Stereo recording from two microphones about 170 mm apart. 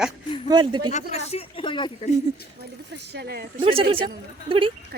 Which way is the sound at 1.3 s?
35° left (ahead or behind).